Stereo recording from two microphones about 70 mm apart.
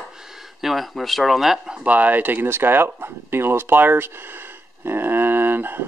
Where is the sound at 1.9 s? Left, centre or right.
Right.